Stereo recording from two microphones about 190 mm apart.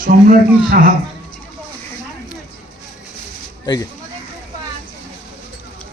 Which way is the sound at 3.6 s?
20° left (ahead or behind).